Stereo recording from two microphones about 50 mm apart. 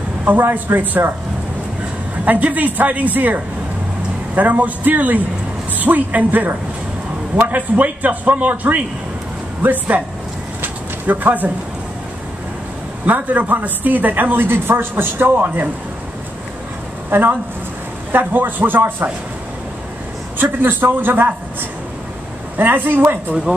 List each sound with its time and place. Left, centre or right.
0.2 s a man's voice: right
2.2 s speech: right
10.6 s bird: right
13.0 s speech: right
18.1 s speech: right
20.6 s a man's voice: right